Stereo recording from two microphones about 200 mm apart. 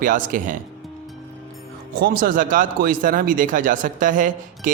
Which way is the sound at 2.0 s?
45° right (ahead or behind).